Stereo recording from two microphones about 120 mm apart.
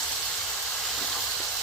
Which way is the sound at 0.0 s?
5° left (ahead or behind).